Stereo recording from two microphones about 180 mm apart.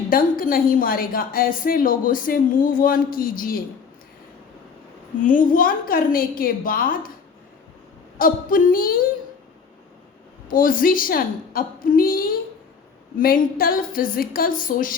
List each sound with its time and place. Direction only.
0.1 s a woman's voice: 50° left (ahead or behind)
5.2 s a woman's voice: 50° left (ahead or behind)
8.2 s a woman's voice: 50° left (ahead or behind)
10.5 s a woman's voice: 50° left (ahead or behind)